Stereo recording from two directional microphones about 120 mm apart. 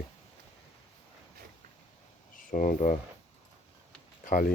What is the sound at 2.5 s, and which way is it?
Speech, 90° left.